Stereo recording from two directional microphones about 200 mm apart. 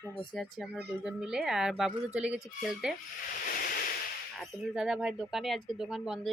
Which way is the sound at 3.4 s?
50° left (ahead or behind).